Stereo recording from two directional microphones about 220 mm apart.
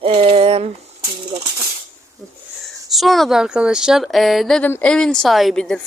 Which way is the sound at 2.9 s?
Centre (ahead or behind).